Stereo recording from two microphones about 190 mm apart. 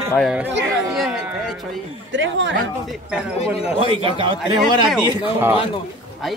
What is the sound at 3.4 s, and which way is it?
Speech, 35° left (ahead or behind).